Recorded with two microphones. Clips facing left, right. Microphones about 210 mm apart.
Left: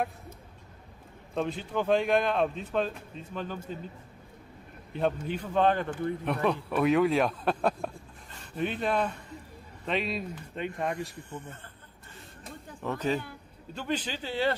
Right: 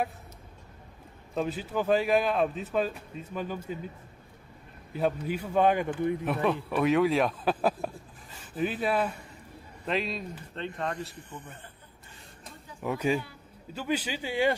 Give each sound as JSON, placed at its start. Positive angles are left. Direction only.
{"t": 1.3, "sound": "a man's voice", "side_deg": -5}
{"t": 4.9, "sound": "a man's voice", "side_deg": -5}
{"t": 6.2, "sound": "a man's voice", "side_deg": 0}
{"t": 11.1, "sound": "a man's voice", "side_deg": -20}
{"t": 12.8, "sound": "a man's voice", "side_deg": -10}